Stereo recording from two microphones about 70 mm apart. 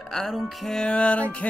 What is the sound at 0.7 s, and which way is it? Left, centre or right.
Music, centre.